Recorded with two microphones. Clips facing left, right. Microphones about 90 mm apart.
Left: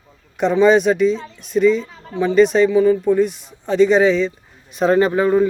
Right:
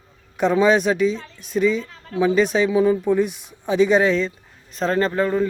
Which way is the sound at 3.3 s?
55° right (ahead or behind).